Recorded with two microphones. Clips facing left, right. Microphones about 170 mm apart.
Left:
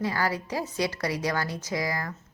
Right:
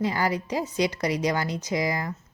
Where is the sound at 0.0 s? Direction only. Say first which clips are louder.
Right 2 dB; 20° right (ahead or behind).